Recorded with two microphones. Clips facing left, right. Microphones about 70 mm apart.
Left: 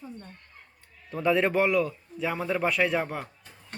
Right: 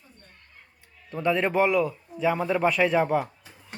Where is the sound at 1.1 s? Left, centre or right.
Centre.